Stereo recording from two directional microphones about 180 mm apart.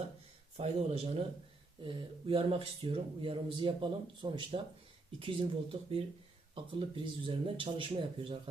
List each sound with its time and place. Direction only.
0.5 s speech: 35° right (ahead or behind)